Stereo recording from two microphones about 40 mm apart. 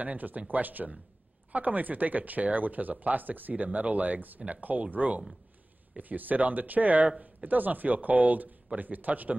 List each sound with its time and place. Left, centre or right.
0.0 s speech: right
7.1 s speech: right
7.4 s speech: right